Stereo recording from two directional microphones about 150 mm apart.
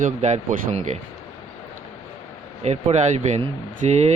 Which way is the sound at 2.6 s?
50° right (ahead or behind).